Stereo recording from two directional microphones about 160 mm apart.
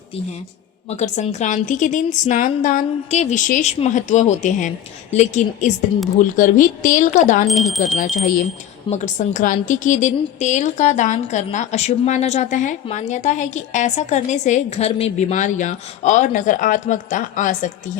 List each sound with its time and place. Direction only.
0.9 s a woman's voice: 45° left (ahead or behind)
7.4 s speech: centre (ahead or behind)
8.9 s a woman's voice: 50° left (ahead or behind)